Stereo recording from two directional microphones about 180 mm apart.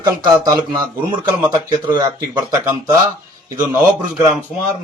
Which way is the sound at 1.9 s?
25° right (ahead or behind).